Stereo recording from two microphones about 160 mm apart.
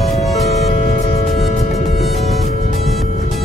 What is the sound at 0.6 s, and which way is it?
Music, 45° left (ahead or behind).